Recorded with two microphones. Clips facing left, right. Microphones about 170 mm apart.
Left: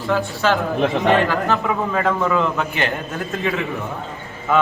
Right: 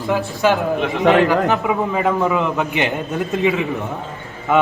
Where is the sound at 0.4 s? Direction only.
15° right (ahead or behind).